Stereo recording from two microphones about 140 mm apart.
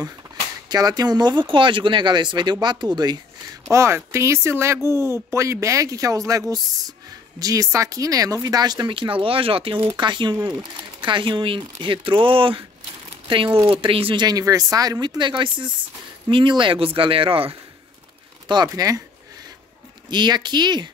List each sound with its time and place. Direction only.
0.7 s speech: 25° right (ahead or behind)
3.7 s speech: 20° right (ahead or behind); by 12.6 s 40° right (ahead or behind)
13.7 s speech: 40° right (ahead or behind)
18.5 s speech: 30° right (ahead or behind)
20.1 s speech: 30° right (ahead or behind)